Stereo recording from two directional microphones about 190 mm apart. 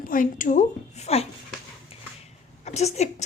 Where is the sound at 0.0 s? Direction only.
45° left (ahead or behind).